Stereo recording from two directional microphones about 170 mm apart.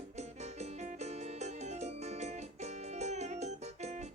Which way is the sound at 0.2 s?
40° right (ahead or behind).